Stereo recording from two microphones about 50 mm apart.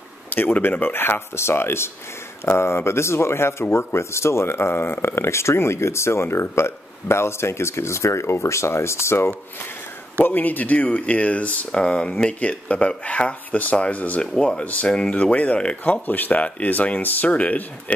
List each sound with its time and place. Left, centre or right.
0.3 s speech: left
5.0 s speech: left
10.2 s speech: left
14.2 s speech: centre
14.6 s speech: left